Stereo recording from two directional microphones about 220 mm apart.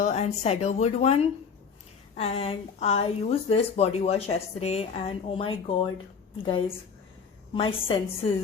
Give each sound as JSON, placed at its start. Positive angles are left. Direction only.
{"t": 0.0, "sound": "speech", "side_deg": 30}